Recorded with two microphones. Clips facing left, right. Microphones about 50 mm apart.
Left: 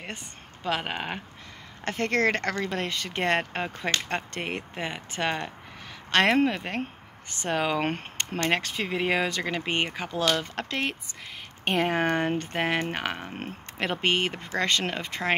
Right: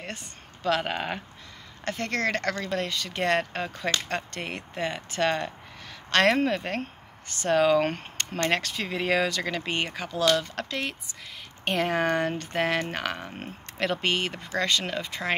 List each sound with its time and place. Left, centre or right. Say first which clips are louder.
0.7 s speech: right 3 dB; centre
1.9 s speech: left 3 dB; left